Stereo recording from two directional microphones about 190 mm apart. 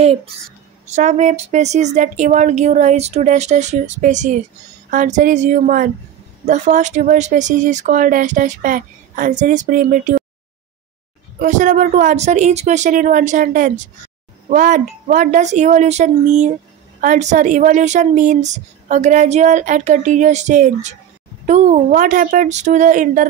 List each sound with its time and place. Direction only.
0.0 s a child's voice: 30° right (ahead or behind); by 10.2 s 50° right (ahead or behind)
11.3 s a woman's voice: 40° right (ahead or behind)